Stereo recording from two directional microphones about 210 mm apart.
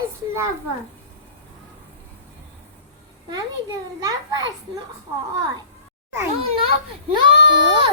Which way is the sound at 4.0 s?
20° right (ahead or behind).